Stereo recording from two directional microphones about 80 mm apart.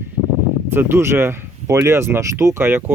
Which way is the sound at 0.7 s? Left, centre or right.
Right.